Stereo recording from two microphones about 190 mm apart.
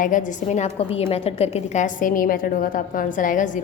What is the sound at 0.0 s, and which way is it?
A woman's voice, 40° left (ahead or behind).